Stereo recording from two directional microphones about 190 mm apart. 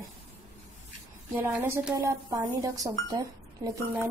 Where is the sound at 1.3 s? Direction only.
10° right (ahead or behind).